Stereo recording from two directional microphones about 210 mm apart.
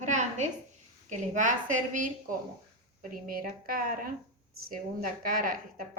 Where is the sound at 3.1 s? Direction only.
45° right (ahead or behind).